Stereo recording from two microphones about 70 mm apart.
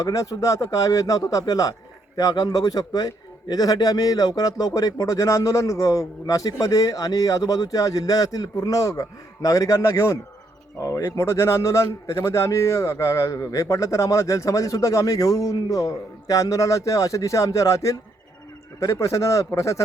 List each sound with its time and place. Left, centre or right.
0.0 s a man's voice: left
2.1 s a man's voice: left